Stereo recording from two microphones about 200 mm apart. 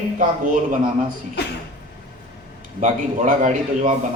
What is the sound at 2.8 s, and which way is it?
A man's voice, 40° right (ahead or behind).